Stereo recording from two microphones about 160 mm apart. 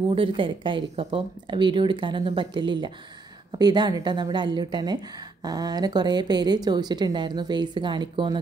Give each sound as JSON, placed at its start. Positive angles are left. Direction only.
{"t": 0.1, "sound": "a woman's voice", "side_deg": -35}